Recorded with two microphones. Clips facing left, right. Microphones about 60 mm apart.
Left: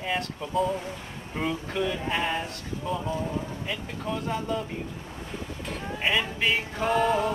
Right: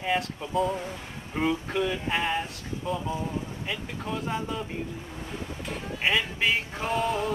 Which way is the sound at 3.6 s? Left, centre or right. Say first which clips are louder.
Left 1 dB; centre.